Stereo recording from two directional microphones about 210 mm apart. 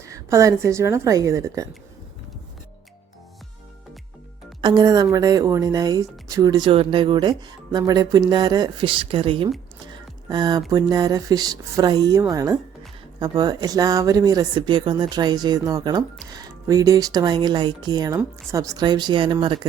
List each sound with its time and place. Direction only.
0.0 s a woman's voice: 15° right (ahead or behind)
4.6 s speech: 20° right (ahead or behind)
9.8 s music: 20° right (ahead or behind)
10.7 s a woman's voice: 20° right (ahead or behind)